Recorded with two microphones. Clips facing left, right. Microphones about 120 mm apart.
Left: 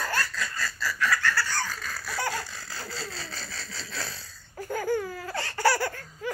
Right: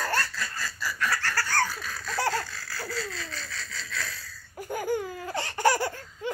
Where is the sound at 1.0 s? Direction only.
40° right (ahead or behind).